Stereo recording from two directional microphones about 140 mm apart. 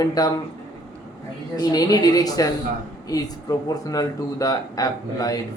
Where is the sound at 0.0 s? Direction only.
25° left (ahead or behind).